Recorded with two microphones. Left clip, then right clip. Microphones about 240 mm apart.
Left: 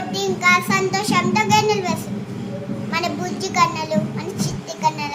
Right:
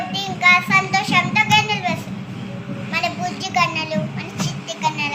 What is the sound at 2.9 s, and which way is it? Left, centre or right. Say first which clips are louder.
Vehicle: right 2 dB; centre.